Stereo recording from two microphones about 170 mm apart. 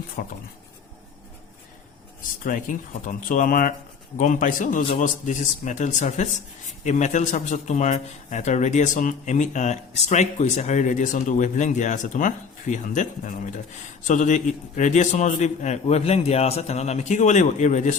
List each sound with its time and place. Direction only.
0.2 s speech: 70° left (ahead or behind)
2.4 s a man's voice: 50° left (ahead or behind)